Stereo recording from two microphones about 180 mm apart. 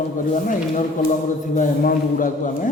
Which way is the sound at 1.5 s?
50° left (ahead or behind).